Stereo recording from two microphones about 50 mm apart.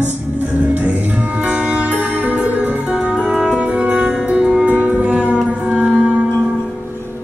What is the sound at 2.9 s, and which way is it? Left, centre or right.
Music, right.